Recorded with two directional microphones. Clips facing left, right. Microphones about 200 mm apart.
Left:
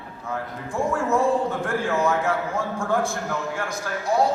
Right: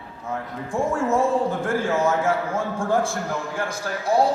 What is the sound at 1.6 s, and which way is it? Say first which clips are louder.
A man's voice: right 1 dB; 30° right (ahead or behind).